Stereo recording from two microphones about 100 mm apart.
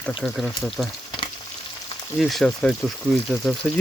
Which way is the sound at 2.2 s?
Centre (ahead or behind).